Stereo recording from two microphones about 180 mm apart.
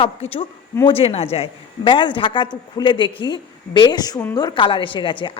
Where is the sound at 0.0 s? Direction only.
30° left (ahead or behind).